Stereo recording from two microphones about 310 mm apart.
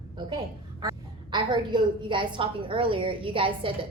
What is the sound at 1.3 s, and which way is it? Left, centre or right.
A woman's voice, centre.